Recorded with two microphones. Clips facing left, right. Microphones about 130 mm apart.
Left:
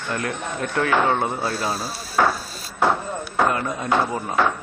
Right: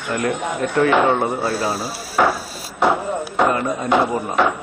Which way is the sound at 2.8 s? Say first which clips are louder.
Right 3 dB; 15° right (ahead or behind).